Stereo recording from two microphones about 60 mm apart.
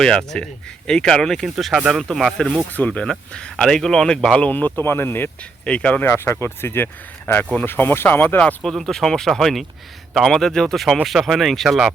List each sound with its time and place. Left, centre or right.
0.0 s speech: centre
2.7 s speech: left
3.1 s speech: centre
4.4 s speech: left
5.6 s speech: left
6.0 s speech: left
8.6 s speech: centre